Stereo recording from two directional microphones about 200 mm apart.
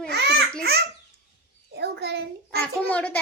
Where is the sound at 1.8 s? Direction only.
55° right (ahead or behind).